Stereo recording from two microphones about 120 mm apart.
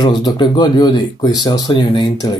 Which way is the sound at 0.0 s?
35° left (ahead or behind).